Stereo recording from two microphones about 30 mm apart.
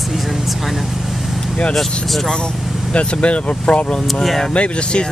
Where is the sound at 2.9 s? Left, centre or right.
Left.